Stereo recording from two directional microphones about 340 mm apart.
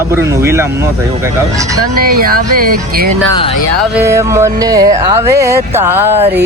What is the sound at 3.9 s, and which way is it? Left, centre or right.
Speech, centre.